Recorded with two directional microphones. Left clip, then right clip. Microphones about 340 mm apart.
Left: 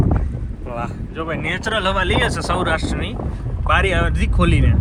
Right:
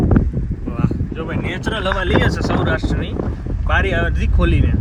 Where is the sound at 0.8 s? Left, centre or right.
Centre.